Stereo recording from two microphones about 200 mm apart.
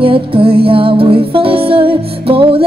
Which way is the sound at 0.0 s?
25° right (ahead or behind).